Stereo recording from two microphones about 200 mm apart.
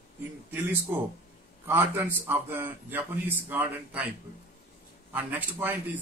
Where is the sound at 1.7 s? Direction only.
10° right (ahead or behind).